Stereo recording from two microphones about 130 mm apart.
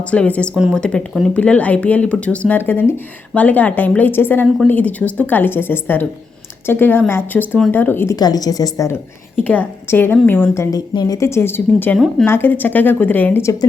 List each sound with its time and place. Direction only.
0.0 s speech: 10° left (ahead or behind)
8.1 s a woman's voice: 30° left (ahead or behind)
9.3 s a woman's voice: 10° left (ahead or behind)